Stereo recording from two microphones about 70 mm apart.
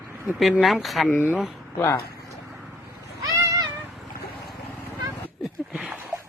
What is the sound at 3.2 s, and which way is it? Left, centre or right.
Music, right.